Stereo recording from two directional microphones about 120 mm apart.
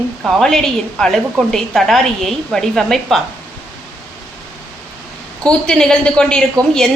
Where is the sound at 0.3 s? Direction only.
5° left (ahead or behind).